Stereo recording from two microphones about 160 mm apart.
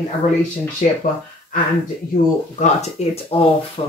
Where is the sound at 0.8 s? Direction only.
55° left (ahead or behind).